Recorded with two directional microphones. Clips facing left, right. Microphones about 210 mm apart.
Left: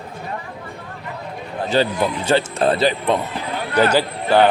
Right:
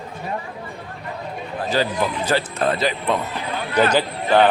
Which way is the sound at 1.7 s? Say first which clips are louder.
Left 3 dB; 25° left (ahead or behind).